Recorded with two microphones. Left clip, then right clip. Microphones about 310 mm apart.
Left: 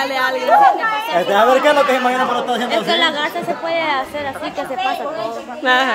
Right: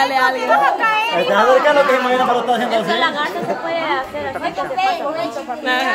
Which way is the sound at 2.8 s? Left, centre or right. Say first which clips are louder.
Left 1 dB; left.